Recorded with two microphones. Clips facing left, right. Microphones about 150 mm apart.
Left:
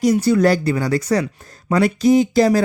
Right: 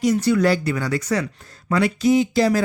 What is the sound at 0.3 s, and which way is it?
Speech, 40° left (ahead or behind).